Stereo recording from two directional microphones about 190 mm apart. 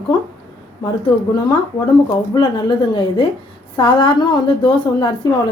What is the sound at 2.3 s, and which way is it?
Speech, 25° left (ahead or behind).